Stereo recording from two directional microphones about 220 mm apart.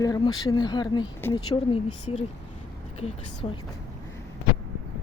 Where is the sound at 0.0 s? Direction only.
15° left (ahead or behind).